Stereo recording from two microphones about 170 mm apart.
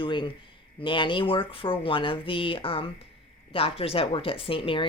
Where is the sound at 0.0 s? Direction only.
30° left (ahead or behind).